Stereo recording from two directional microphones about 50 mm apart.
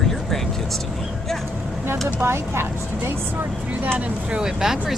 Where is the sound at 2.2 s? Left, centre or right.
Right.